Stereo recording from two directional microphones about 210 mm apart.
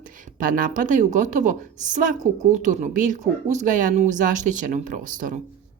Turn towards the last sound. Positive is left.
turn(degrees=-35)  # may be behind; listen again after turning